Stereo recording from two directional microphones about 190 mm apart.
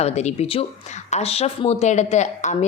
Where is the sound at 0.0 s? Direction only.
35° left (ahead or behind).